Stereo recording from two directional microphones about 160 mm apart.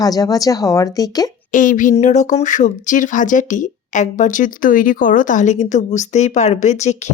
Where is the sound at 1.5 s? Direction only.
55° left (ahead or behind).